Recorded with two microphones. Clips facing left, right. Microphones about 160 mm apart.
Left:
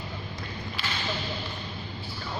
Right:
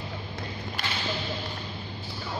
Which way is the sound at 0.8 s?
45° right (ahead or behind).